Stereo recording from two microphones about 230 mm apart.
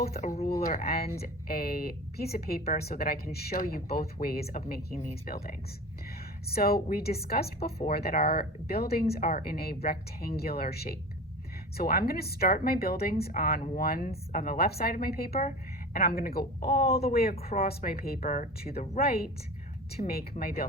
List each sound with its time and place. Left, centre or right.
0.0 s speech: left